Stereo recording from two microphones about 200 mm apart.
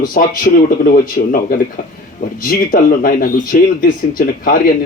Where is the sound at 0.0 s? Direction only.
45° left (ahead or behind).